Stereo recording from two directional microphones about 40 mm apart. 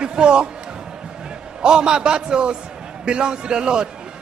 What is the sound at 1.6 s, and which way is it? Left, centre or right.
Speech, right.